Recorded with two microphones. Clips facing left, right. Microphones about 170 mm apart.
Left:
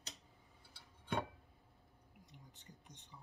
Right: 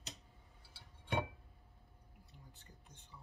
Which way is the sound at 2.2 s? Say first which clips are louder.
Left 1 dB; 20° left (ahead or behind).